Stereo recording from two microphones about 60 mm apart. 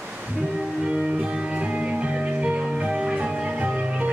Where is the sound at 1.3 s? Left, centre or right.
Right.